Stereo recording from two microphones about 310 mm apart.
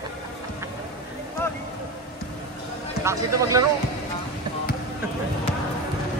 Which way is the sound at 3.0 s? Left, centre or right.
Centre.